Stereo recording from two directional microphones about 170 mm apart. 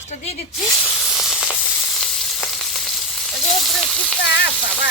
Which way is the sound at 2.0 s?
Centre (ahead or behind).